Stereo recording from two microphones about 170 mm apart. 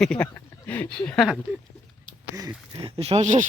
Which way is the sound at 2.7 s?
30° right (ahead or behind).